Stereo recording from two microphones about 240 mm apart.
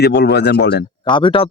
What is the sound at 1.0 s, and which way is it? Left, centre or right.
Speech, centre.